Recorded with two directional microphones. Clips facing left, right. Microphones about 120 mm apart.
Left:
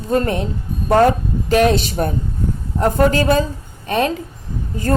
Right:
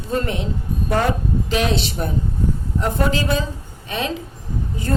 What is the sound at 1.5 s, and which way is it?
A woman's voice, 50° left (ahead or behind).